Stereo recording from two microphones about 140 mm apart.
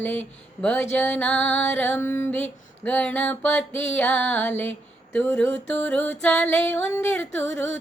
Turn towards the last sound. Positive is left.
turn(degrees=15)  # may be behind; listen again after turning